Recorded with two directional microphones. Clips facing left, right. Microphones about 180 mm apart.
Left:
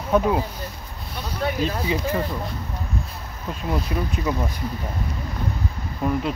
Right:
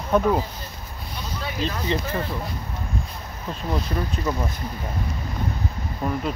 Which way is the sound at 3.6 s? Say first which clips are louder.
Left 1 dB; 5° left (ahead or behind).